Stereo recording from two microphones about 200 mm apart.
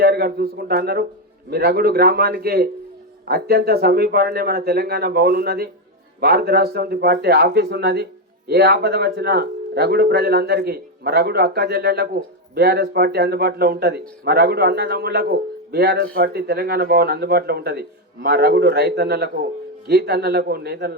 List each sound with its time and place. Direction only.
0.0 s a man's voice: 50° right (ahead or behind)